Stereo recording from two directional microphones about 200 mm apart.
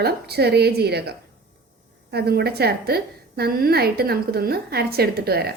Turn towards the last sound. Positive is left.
turn(degrees=-50)  # may be behind; listen again after turning